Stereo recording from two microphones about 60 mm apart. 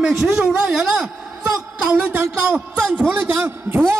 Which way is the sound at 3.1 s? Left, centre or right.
Right.